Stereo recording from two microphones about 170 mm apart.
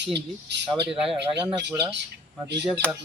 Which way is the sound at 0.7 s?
5° right (ahead or behind).